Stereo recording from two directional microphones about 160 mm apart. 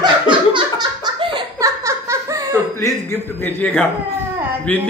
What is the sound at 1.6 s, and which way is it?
Laughter, 20° right (ahead or behind).